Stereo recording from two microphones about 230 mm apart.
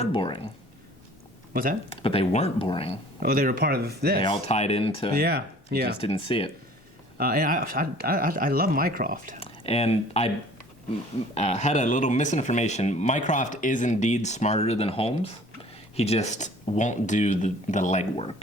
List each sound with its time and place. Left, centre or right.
0.0 s speech: left
1.9 s speech: left
3.2 s speech: right
4.2 s speech: left
5.1 s speech: right
6.0 s speech: left
7.2 s speech: right
9.4 s speech: left
11.3 s speech: left